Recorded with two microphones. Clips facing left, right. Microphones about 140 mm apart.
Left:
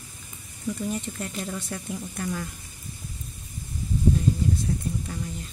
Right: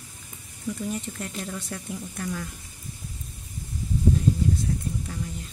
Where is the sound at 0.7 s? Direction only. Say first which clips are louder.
Left 1 dB; centre (ahead or behind).